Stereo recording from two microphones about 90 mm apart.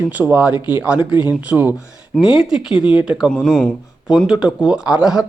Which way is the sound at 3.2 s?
5° left (ahead or behind).